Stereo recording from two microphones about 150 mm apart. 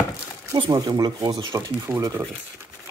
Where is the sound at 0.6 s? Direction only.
25° right (ahead or behind).